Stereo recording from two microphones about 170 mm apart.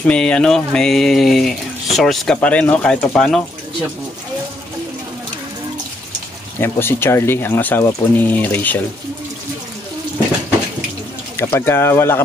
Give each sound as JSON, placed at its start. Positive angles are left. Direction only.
{"t": 0.0, "sound": "speech", "side_deg": 5}
{"t": 6.6, "sound": "speech", "side_deg": 15}
{"t": 11.3, "sound": "speech", "side_deg": 15}